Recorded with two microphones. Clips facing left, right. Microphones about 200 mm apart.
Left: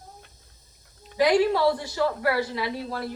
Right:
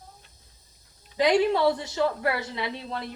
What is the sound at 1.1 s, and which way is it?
A woman's voice, 20° right (ahead or behind).